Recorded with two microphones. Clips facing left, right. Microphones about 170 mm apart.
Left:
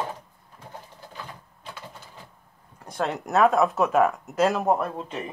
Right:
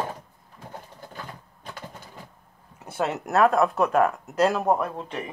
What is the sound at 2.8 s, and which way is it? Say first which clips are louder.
Speech: right 1 dB; 5° right (ahead or behind).